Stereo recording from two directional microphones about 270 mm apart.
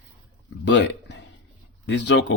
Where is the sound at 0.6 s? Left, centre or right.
Left.